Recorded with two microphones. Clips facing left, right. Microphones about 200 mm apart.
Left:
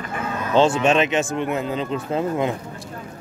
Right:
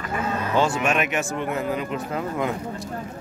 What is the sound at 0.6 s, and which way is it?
Speech, 25° left (ahead or behind).